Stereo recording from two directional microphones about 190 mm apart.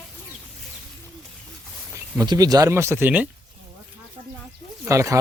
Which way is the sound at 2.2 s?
20° right (ahead or behind).